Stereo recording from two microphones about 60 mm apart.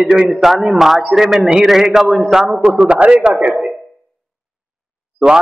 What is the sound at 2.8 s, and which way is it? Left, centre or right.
Speech, right.